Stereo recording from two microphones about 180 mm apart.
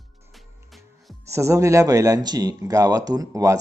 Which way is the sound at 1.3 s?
15° right (ahead or behind).